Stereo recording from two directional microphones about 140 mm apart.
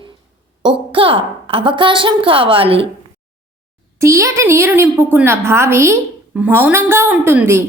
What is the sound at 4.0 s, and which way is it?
A woman's voice, 20° right (ahead or behind).